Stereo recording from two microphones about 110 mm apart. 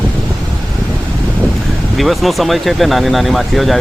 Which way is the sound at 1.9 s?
Centre (ahead or behind).